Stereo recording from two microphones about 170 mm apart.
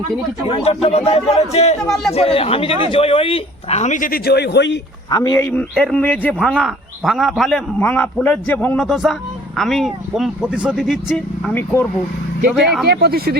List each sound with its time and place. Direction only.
0.4 s speech: 35° left (ahead or behind); by 4.8 s 90° left
5.1 s a man's voice: 20° left (ahead or behind); by 11.5 s 5° right (ahead or behind)
11.5 s a man's voice: 10° left (ahead or behind)
12.8 s speech: 70° right (ahead or behind)